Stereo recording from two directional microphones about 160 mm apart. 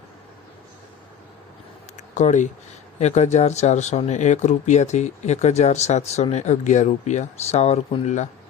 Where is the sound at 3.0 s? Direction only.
45° left (ahead or behind).